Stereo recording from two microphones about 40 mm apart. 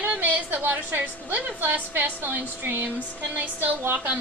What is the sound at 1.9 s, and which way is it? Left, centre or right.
A woman's voice, right.